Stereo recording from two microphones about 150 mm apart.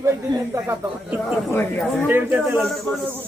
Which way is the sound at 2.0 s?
10° right (ahead or behind).